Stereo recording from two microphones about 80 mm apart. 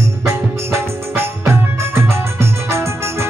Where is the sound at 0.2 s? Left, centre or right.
Right.